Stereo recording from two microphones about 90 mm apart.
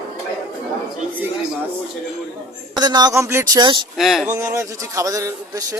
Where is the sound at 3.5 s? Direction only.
55° right (ahead or behind).